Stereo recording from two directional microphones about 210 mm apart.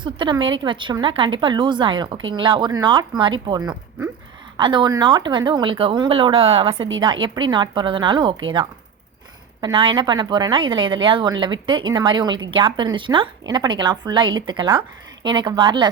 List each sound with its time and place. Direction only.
0.0 s a woman's voice: 20° right (ahead or behind)
9.6 s a woman's voice: 20° right (ahead or behind)